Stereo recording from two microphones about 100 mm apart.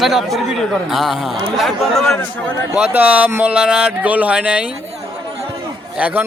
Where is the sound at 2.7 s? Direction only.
15° right (ahead or behind).